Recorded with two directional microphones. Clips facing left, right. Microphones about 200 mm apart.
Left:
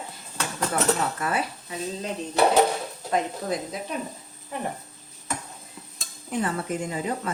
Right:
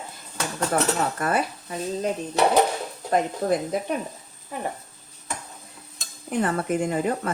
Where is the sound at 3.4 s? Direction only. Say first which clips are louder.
Right 6 dB; 55° right (ahead or behind).